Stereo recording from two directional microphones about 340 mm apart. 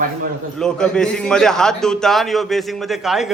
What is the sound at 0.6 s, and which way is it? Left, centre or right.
A man's voice, centre.